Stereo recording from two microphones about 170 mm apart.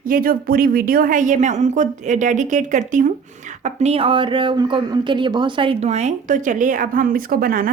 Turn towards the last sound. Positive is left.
turn(degrees=-55)  # may be behind; listen again after turning